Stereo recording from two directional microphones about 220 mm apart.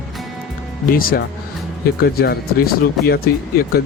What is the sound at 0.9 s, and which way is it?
Speech, 40° left (ahead or behind).